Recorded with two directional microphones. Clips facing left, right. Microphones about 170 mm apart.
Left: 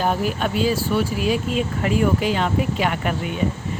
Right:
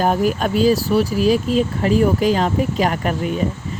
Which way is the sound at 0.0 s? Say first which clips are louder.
Right 4 dB; 45° right (ahead or behind).